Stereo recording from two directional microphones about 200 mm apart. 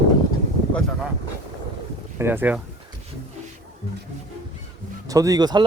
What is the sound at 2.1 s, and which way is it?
Speech, 10° right (ahead or behind).